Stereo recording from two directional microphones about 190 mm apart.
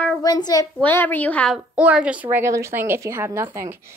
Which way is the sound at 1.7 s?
5° right (ahead or behind).